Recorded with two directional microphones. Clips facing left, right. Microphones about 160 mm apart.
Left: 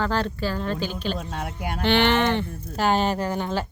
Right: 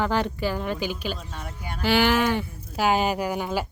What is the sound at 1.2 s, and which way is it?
Speech, 65° left (ahead or behind).